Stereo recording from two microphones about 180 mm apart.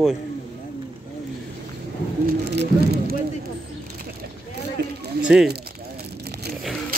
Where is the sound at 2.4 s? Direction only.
65° right (ahead or behind).